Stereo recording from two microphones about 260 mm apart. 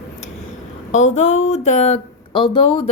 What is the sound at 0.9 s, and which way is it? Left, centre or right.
Speech, left.